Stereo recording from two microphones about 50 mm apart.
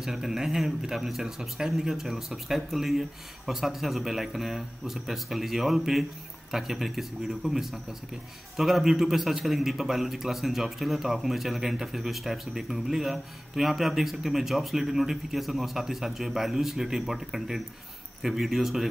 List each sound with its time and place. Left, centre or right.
0.0 s speech: centre